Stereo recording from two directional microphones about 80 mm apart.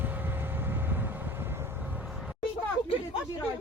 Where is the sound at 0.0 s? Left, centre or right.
Right.